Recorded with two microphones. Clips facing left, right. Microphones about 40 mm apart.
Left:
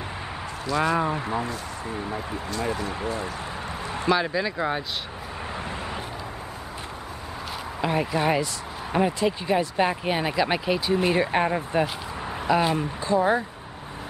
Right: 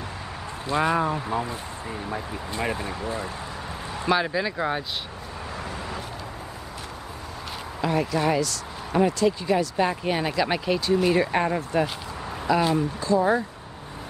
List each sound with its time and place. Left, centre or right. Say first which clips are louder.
0.7 s speech: right 1 dB; right
1.9 s speech: even; centre
2.5 s speech: even; right
4.1 s speech: even; centre
7.8 s speech: even; centre